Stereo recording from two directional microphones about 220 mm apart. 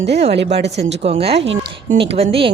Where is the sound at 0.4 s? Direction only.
30° right (ahead or behind).